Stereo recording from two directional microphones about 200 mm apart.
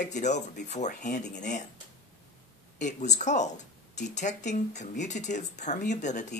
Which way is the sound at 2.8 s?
35° left (ahead or behind).